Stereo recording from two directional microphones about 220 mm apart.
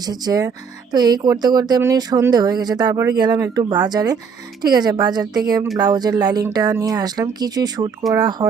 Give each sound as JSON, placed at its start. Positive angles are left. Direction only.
{"t": 0.0, "sound": "speech", "side_deg": -15}